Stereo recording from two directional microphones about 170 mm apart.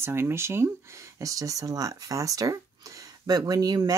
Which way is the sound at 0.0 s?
15° right (ahead or behind).